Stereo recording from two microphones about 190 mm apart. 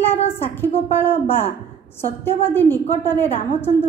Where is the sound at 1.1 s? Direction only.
30° left (ahead or behind).